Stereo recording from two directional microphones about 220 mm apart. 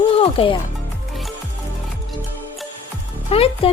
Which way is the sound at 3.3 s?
25° left (ahead or behind).